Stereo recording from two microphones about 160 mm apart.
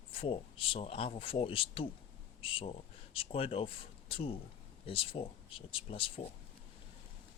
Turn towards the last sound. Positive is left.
turn(degrees=35)  # may be behind; listen again after turning